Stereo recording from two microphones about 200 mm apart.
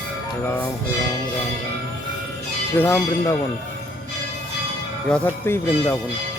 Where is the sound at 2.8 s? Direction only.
10° left (ahead or behind).